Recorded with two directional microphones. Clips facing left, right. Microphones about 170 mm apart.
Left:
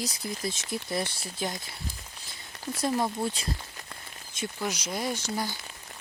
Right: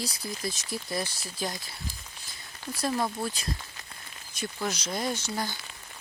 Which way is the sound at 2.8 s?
20° left (ahead or behind).